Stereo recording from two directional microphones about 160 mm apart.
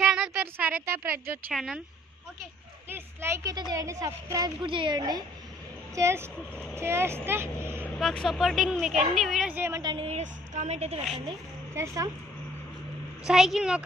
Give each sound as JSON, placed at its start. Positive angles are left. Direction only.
{"t": 0.0, "sound": "a sound", "side_deg": -5}
{"t": 1.5, "sound": "speech", "side_deg": 0}
{"t": 2.9, "sound": "a woman's voice", "side_deg": -15}
{"t": 7.8, "sound": "speech", "side_deg": 5}
{"t": 9.8, "sound": "a woman's voice", "side_deg": -30}
{"t": 10.0, "sound": "a woman's voice", "side_deg": -45}
{"t": 11.7, "sound": "a woman's voice", "side_deg": -20}
{"t": 13.3, "sound": "speech", "side_deg": 0}